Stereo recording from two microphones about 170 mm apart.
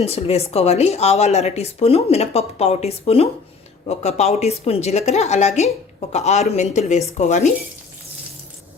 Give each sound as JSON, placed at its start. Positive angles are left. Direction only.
{"t": 0.0, "sound": "speech", "side_deg": 35}